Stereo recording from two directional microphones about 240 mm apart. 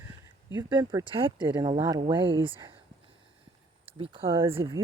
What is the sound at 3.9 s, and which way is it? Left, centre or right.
Speech, right.